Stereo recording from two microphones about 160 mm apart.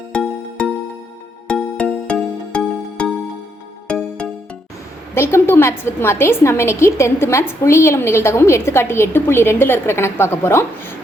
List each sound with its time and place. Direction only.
0.1 s music: 5° left (ahead or behind)
5.1 s a woman's voice: 15° left (ahead or behind)